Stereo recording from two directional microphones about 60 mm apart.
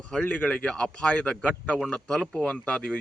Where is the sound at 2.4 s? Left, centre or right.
Centre.